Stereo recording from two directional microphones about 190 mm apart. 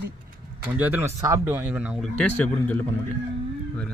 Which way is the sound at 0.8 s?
10° right (ahead or behind).